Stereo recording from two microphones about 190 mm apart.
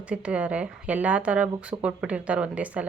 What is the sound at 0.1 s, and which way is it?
A woman's voice, 5° right (ahead or behind).